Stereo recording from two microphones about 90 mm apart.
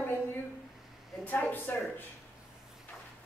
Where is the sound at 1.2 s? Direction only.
20° left (ahead or behind).